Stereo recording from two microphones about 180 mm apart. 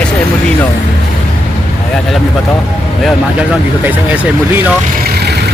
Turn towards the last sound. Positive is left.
turn(degrees=-10)  # may be behind; listen again after turning